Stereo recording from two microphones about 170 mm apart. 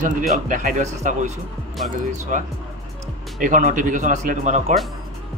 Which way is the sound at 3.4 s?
50° right (ahead or behind).